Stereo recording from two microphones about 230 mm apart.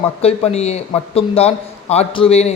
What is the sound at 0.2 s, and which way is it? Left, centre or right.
A man's voice, left.